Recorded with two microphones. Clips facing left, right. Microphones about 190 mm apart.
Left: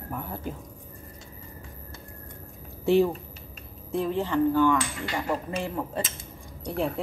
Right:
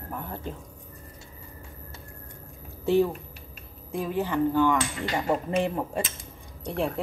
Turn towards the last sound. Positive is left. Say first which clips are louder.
# even
turn(degrees=0)  # may be behind; listen again after turning